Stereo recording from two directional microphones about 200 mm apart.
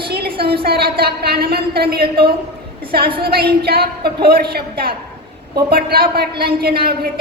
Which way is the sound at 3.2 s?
50° right (ahead or behind).